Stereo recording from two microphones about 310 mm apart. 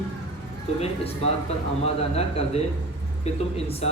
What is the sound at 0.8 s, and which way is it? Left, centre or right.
Speech, centre.